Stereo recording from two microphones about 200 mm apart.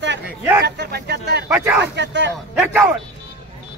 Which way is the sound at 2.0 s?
60° right (ahead or behind).